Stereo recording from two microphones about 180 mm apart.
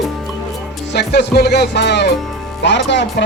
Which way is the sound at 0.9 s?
70° left (ahead or behind).